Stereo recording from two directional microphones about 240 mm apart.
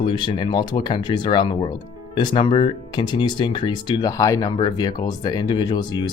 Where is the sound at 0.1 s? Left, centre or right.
Left.